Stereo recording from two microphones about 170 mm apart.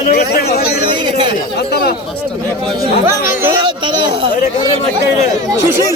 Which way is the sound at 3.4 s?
30° right (ahead or behind).